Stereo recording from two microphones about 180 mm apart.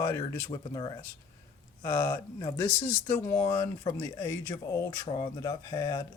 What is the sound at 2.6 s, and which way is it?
A man's voice, 15° left (ahead or behind).